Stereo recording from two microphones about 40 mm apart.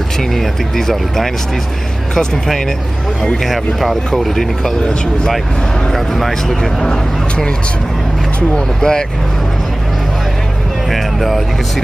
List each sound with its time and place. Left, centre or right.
0.4 s speech: centre
5.9 s speech: centre
8.5 s speech: centre
10.9 s speech: centre